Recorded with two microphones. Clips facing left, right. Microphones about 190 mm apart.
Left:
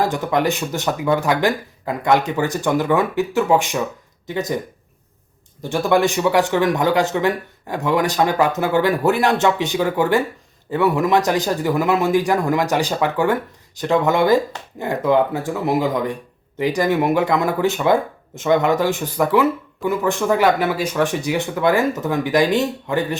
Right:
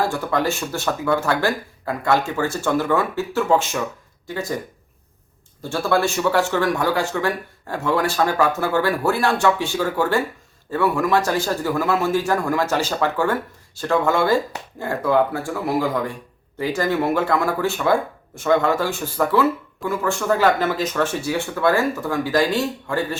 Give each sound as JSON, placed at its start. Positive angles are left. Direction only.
{"t": 0.0, "sound": "speech", "side_deg": 20}
{"t": 5.6, "sound": "speech", "side_deg": 20}